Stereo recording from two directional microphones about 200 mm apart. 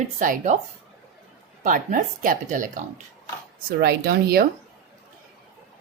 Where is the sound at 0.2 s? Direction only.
40° right (ahead or behind).